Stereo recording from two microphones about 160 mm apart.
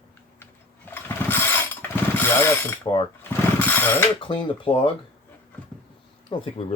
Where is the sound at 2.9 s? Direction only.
25° left (ahead or behind).